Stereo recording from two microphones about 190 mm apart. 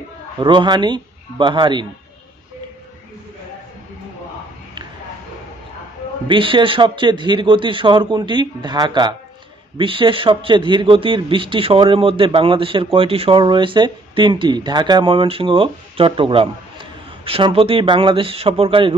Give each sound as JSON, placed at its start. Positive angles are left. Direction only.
{"t": 0.4, "sound": "a man's voice", "side_deg": -25}
{"t": 6.2, "sound": "a man's voice", "side_deg": -25}